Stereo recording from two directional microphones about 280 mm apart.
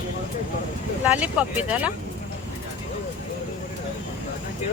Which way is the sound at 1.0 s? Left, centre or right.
Centre.